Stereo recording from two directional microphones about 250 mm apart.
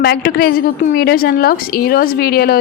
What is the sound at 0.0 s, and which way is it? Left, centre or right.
A woman's voice, left.